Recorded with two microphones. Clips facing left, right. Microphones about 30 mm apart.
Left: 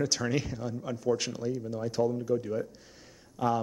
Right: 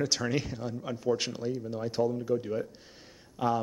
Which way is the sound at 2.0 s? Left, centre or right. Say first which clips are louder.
Even; centre.